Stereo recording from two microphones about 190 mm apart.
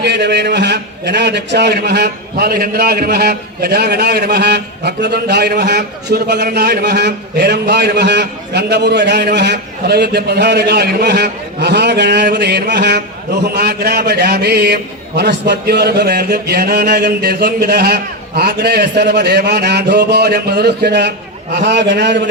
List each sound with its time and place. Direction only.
0.0 s a man's voice: 65° right (ahead or behind)